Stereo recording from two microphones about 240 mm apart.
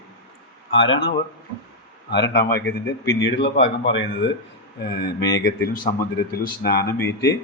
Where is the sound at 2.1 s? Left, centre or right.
Left.